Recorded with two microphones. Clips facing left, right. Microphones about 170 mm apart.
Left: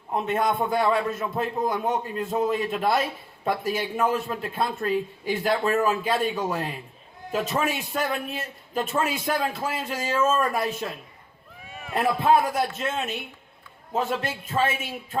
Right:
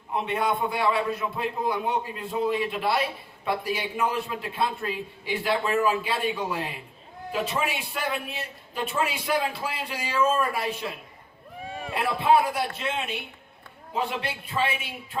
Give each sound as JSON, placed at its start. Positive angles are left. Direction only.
{"t": 0.3, "sound": "a man's voice", "side_deg": 45}
{"t": 11.7, "sound": "a sound", "side_deg": -30}
{"t": 11.9, "sound": "a man's voice", "side_deg": 45}